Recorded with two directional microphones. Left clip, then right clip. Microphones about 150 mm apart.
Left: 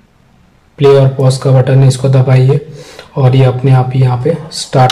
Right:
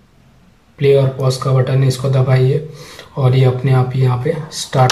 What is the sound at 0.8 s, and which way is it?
Speech, 25° left (ahead or behind).